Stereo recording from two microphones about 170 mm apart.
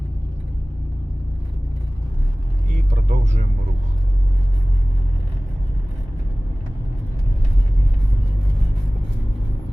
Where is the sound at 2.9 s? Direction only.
45° right (ahead or behind).